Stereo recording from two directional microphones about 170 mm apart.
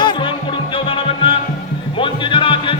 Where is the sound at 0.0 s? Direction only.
30° left (ahead or behind).